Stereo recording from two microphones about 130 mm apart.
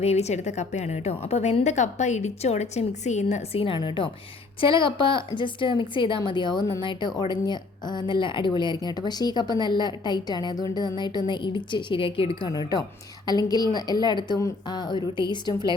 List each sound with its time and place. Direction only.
0.0 s a woman's voice: 55° left (ahead or behind)
13.2 s speech: 30° left (ahead or behind)